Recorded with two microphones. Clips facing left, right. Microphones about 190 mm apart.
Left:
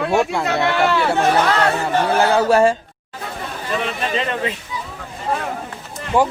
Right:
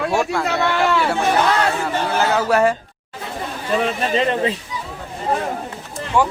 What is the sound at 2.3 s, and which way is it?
Speech, 30° left (ahead or behind).